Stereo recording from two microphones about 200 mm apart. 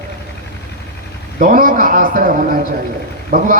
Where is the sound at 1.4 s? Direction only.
45° right (ahead or behind).